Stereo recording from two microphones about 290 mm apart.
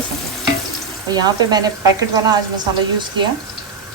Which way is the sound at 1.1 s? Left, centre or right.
Centre.